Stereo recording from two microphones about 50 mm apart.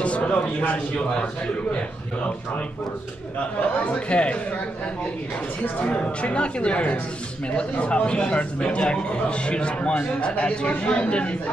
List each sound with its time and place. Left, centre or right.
0.0 s a man's voice: left
3.8 s speech: left
5.9 s speech: left